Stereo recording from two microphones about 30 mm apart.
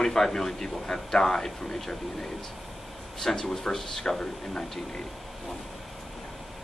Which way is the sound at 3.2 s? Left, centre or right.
Centre.